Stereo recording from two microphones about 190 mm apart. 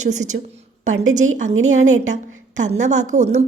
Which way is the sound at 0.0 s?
40° right (ahead or behind).